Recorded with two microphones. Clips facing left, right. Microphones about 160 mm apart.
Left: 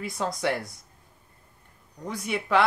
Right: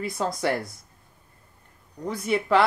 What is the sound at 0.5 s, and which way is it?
Speech, 50° right (ahead or behind).